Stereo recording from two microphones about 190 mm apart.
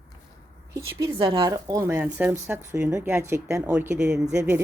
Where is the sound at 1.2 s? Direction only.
25° right (ahead or behind).